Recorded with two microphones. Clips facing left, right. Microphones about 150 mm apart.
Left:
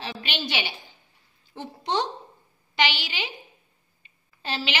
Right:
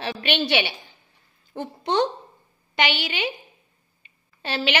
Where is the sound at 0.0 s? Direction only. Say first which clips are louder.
Right 7 dB; 65° right (ahead or behind).